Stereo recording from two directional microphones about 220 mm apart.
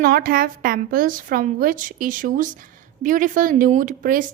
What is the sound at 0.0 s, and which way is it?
A woman's voice, 45° right (ahead or behind).